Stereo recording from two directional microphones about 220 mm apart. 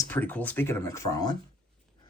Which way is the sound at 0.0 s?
10° left (ahead or behind).